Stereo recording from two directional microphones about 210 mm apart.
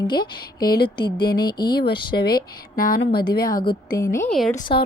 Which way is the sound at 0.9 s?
20° left (ahead or behind).